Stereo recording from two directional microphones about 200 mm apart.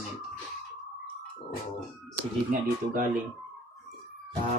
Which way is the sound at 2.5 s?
45° right (ahead or behind).